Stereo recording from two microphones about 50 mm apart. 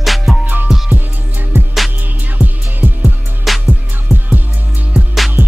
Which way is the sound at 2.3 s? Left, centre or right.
Right.